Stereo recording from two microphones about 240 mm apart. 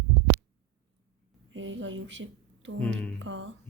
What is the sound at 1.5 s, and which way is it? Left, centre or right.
A woman's voice, right.